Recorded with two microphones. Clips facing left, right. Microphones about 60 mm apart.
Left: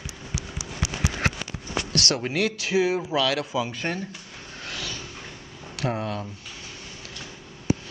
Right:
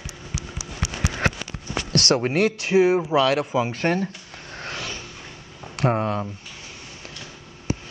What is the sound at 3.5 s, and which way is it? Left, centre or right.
Speech, right.